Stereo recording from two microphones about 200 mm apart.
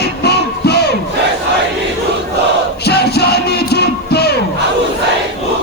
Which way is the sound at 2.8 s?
55° left (ahead or behind).